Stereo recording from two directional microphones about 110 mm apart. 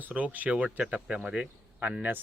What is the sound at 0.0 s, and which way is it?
Speech, 15° right (ahead or behind).